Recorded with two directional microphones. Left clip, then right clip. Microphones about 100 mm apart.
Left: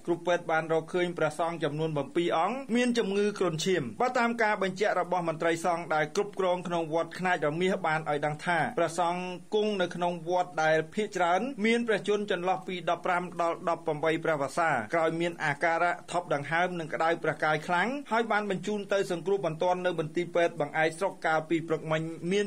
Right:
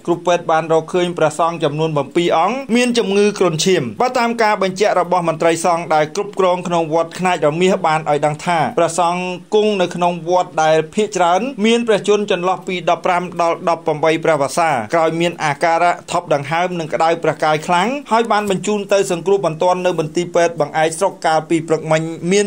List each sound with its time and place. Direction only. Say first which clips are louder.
0.1 s a man's voice: right 13 dB; 15° right (ahead or behind)